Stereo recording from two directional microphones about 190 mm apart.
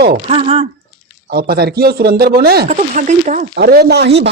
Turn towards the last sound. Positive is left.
turn(degrees=-60)  # may be behind; listen again after turning